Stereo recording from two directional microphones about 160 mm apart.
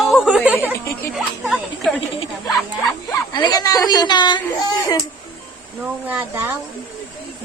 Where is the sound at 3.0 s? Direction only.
25° left (ahead or behind).